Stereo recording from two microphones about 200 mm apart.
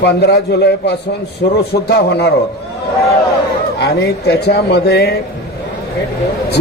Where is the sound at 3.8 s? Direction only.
50° left (ahead or behind).